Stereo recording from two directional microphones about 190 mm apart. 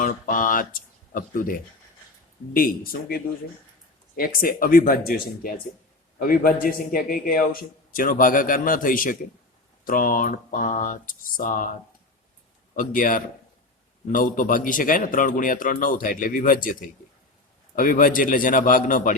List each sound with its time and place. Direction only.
0.0 s a man's voice: 45° left (ahead or behind)
12.7 s a man's voice: 45° left (ahead or behind)
17.7 s a man's voice: 45° left (ahead or behind)